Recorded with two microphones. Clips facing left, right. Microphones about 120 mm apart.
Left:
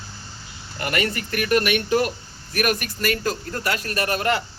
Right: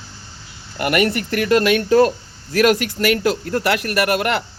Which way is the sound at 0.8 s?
70° right (ahead or behind).